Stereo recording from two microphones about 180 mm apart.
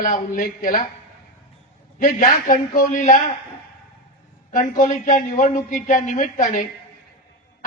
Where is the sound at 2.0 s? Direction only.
50° left (ahead or behind).